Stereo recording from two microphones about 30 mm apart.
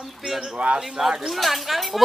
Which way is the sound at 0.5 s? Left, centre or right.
Right.